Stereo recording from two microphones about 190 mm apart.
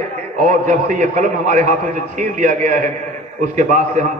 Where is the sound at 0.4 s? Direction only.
40° right (ahead or behind).